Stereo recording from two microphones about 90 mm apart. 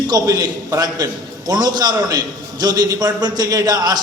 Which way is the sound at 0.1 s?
40° right (ahead or behind).